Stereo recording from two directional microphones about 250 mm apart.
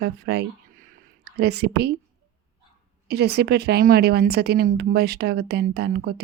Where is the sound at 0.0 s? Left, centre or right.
Right.